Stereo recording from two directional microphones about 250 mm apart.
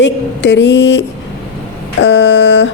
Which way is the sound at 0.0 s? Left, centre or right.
Left.